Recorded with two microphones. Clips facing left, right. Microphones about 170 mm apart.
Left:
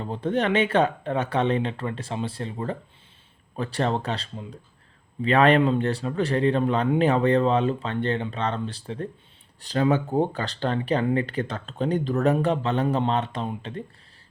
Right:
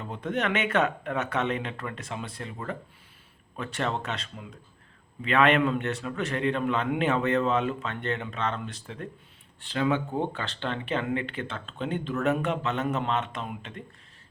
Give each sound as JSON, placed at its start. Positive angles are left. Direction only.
{"t": 0.0, "sound": "speech", "side_deg": 30}